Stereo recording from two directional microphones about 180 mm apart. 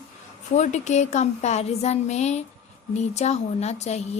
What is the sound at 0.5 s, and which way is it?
Speech, 40° left (ahead or behind).